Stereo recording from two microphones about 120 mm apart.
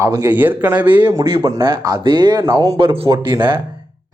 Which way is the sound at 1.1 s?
35° right (ahead or behind).